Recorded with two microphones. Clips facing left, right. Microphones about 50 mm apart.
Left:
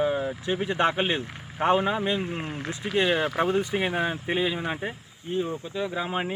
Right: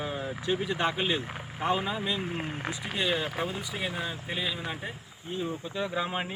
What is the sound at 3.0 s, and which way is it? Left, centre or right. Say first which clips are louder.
Speech: left 7 dB; left.